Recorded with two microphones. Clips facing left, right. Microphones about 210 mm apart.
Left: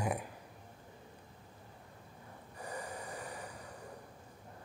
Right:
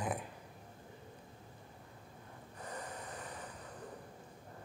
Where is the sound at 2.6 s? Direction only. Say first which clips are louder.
Left 2 dB; 10° left (ahead or behind).